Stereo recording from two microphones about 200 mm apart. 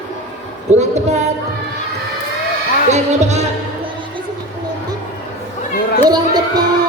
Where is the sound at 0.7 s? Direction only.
35° right (ahead or behind).